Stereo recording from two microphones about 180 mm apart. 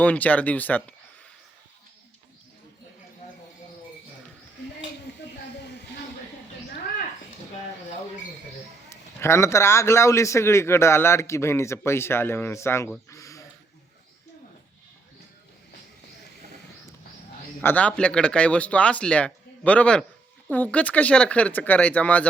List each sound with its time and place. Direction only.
0.0 s a man's voice: 10° left (ahead or behind)
8.9 s a man's voice: 15° left (ahead or behind)
13.1 s a sound: 15° left (ahead or behind)
17.6 s a man's voice: 10° left (ahead or behind)